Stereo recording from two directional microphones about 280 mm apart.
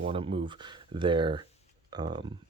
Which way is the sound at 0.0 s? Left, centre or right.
Right.